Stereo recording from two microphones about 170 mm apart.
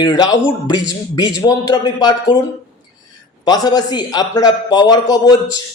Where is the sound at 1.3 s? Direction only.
20° left (ahead or behind).